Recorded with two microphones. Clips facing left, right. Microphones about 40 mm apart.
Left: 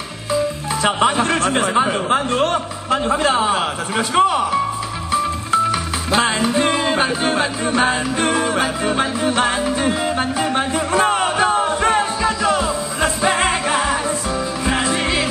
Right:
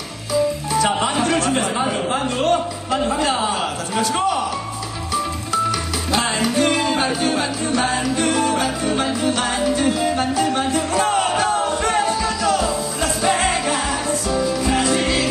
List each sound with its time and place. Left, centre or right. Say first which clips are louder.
0.3 s speech: right 1 dB; left
5.1 s music: left 4 dB; left